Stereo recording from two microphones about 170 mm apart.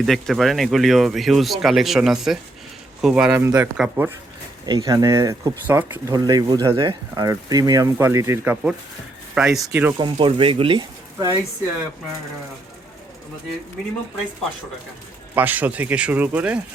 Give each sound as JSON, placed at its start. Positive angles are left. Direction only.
{"t": 0.0, "sound": "speech", "side_deg": 0}
{"t": 4.6, "sound": "speech", "side_deg": -25}
{"t": 6.1, "sound": "speech", "side_deg": -25}
{"t": 10.0, "sound": "speech", "side_deg": -30}
{"t": 15.4, "sound": "speech", "side_deg": -10}